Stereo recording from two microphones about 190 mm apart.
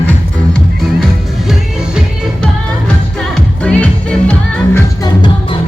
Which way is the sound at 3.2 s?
5° left (ahead or behind).